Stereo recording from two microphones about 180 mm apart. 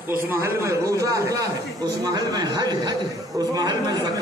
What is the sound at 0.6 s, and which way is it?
A man's voice, 15° right (ahead or behind).